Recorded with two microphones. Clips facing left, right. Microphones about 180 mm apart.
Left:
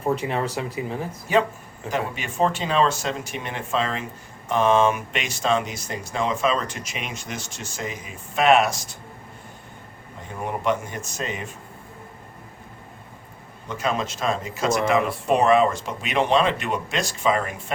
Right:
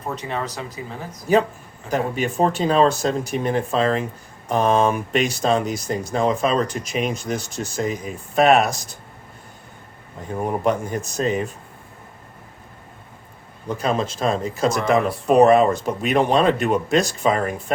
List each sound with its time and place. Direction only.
0.2 s speech: 30° left (ahead or behind)
1.9 s speech: 40° right (ahead or behind)
10.4 s speech: 40° right (ahead or behind)
13.7 s speech: 35° right (ahead or behind)